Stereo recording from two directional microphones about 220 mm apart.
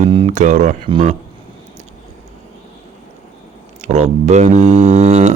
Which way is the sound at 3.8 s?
30° right (ahead or behind).